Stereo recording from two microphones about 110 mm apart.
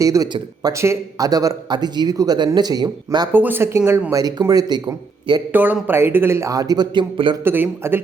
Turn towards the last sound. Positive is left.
turn(degrees=-20)  # may be behind; listen again after turning